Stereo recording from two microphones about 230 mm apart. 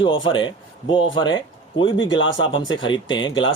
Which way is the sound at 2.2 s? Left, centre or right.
Left.